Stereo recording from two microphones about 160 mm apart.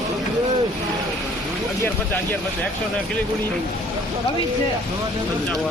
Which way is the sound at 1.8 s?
15° left (ahead or behind).